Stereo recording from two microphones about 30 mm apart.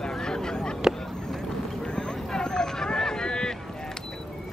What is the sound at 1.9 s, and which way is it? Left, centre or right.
Vehicle, left.